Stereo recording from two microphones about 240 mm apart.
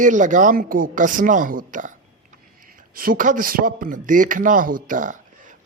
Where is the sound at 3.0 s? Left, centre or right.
Right.